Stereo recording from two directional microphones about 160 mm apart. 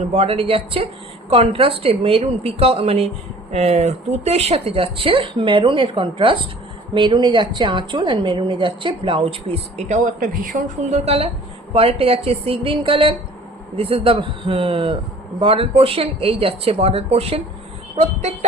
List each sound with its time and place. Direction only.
0.1 s a woman's voice: 40° right (ahead or behind); by 11.0 s 60° right (ahead or behind)
11.0 s a woman's voice: 40° right (ahead or behind)